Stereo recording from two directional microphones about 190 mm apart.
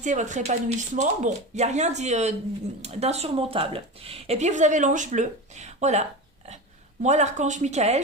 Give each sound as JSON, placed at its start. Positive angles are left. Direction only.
{"t": 0.0, "sound": "speech", "side_deg": -40}